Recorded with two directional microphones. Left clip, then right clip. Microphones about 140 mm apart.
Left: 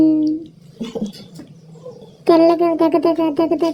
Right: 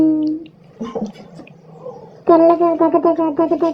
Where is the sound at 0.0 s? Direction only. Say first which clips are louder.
Left 1 dB; 25° left (ahead or behind).